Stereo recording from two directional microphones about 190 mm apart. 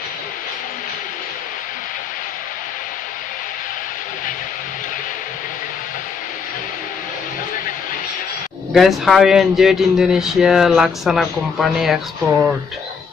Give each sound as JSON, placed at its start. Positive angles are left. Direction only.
{"t": 8.7, "sound": "speech", "side_deg": 0}